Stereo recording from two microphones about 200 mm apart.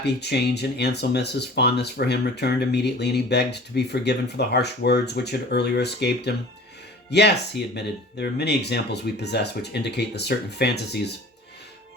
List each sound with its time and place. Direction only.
0.0 s speech: 55° left (ahead or behind)